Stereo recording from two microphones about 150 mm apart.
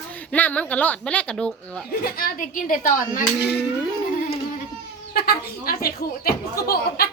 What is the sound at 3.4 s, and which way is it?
Speech, 90° left.